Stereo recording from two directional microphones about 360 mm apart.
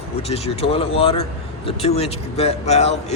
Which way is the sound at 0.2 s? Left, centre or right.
Centre.